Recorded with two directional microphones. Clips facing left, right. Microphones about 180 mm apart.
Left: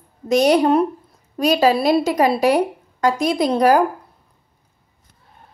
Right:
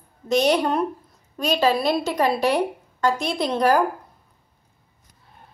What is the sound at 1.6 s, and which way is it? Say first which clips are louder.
A woman's voice: left 4 dB; 40° left (ahead or behind).